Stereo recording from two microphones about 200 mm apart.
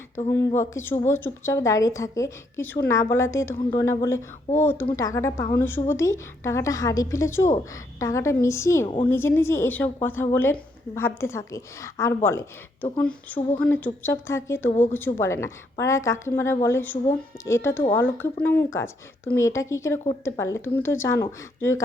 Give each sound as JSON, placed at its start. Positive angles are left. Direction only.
{"t": 0.3, "sound": "a woman's voice", "side_deg": 15}